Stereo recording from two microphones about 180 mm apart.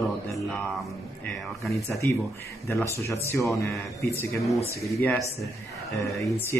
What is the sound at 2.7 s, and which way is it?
Speech, 15° left (ahead or behind).